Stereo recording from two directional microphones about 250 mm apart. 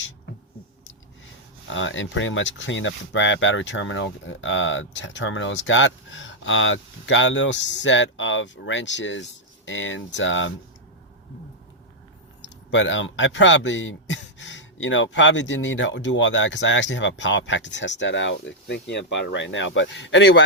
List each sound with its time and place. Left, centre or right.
1.7 s speech: left
12.7 s speech: left